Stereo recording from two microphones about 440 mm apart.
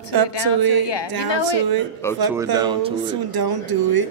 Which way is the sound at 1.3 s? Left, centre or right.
Left.